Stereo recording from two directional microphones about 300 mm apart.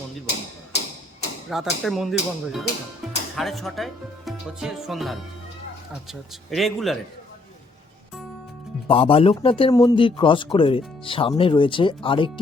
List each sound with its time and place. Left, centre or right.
1.5 s speech: centre
8.9 s speech: centre